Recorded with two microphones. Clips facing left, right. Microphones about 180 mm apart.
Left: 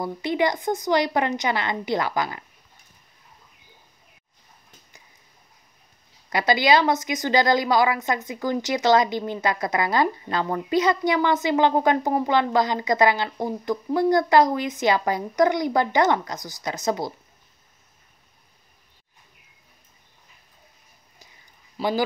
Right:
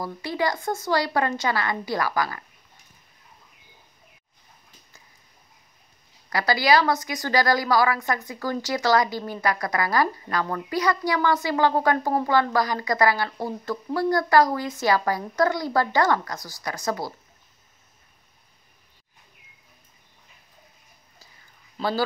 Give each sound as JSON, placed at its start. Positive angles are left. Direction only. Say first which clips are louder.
{"t": 0.0, "sound": "a woman's voice", "louder": "left 3 dB", "side_deg": 20}
{"t": 6.3, "sound": "a woman's voice", "louder": "left 1 dB", "side_deg": 20}
{"t": 21.7, "sound": "a man's voice", "louder": "left 2 dB", "side_deg": 15}